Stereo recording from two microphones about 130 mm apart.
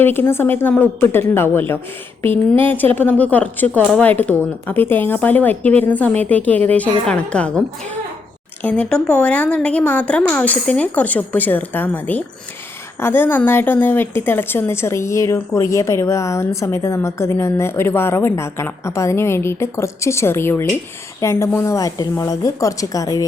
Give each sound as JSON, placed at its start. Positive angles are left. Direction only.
{"t": 0.0, "sound": "a woman's voice", "side_deg": 15}
{"t": 8.6, "sound": "a woman's voice", "side_deg": 10}